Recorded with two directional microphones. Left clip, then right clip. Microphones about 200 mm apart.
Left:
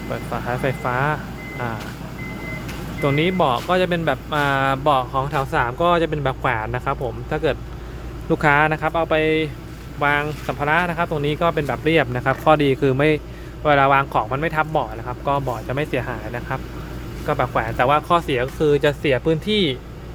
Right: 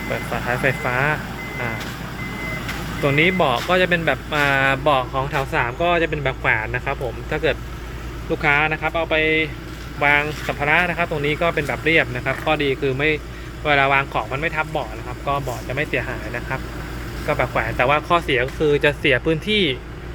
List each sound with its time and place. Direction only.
0.1 s speech: 5° left (ahead or behind)
3.0 s speech: 15° left (ahead or behind)
8.3 s speech: 30° left (ahead or behind)
10.0 s speech: 15° left (ahead or behind)